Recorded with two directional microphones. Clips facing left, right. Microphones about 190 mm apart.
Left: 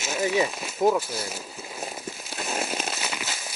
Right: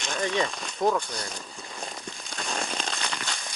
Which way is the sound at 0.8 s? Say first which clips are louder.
Left 3 dB; 25° left (ahead or behind).